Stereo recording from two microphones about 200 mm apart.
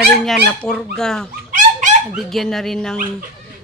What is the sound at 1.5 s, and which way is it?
Dog, 40° right (ahead or behind).